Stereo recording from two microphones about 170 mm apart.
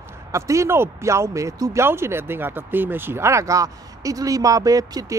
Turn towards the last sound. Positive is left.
turn(degrees=-20)  # may be behind; listen again after turning